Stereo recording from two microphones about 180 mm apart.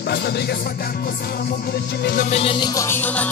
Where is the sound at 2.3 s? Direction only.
30° left (ahead or behind); by 3.3 s 10° left (ahead or behind).